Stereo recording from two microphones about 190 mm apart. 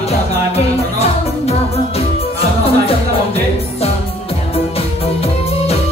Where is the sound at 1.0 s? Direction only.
35° left (ahead or behind).